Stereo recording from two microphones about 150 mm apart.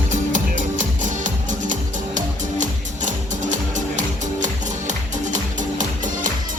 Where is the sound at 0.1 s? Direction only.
55° right (ahead or behind).